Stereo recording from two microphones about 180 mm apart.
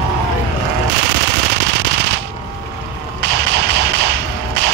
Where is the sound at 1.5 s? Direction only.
70° right (ahead or behind).